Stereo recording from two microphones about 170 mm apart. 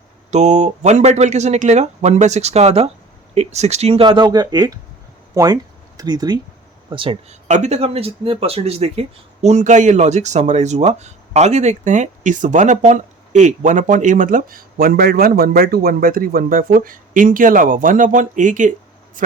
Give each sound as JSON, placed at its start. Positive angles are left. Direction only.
{"t": 0.3, "sound": "speech", "side_deg": -45}
{"t": 7.4, "sound": "speech", "side_deg": -45}